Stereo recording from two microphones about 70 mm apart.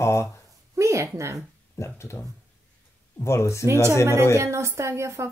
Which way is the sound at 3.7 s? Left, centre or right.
Right.